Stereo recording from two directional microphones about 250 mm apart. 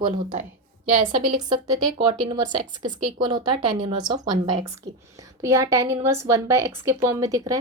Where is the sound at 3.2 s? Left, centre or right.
Centre.